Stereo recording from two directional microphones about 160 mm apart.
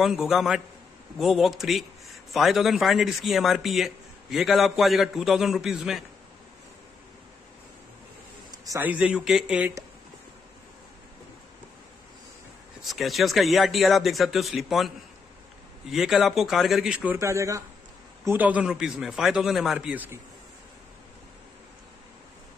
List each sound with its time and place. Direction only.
0.0 s a man's voice: centre (ahead or behind)
8.5 s a sound: 20° right (ahead or behind)
8.8 s a man's voice: 10° right (ahead or behind)
12.8 s a man's voice: centre (ahead or behind)
15.9 s a man's voice: centre (ahead or behind)